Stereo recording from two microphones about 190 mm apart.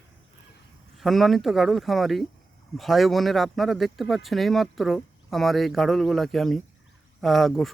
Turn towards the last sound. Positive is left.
turn(degrees=0)  # may be behind; listen again after turning